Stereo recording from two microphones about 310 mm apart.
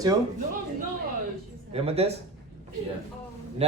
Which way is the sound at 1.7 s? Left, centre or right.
Centre.